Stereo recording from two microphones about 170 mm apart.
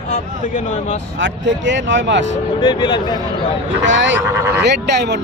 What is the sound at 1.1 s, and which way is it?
Speech, 90° right.